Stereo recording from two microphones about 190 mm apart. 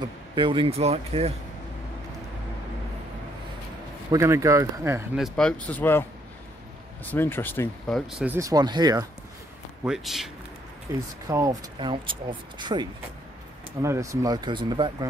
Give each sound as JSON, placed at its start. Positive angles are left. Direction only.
{"t": 0.4, "sound": "speech", "side_deg": -25}
{"t": 4.1, "sound": "speech", "side_deg": -15}
{"t": 5.1, "sound": "speech", "side_deg": 0}
{"t": 7.1, "sound": "speech", "side_deg": 10}
{"t": 8.1, "sound": "speech", "side_deg": -5}
{"t": 8.4, "sound": "speech", "side_deg": -20}
{"t": 9.8, "sound": "speech", "side_deg": 0}
{"t": 11.2, "sound": "speech", "side_deg": -20}
{"t": 13.8, "sound": "speech", "side_deg": -15}